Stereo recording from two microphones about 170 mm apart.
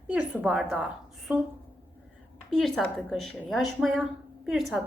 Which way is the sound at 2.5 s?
Centre (ahead or behind).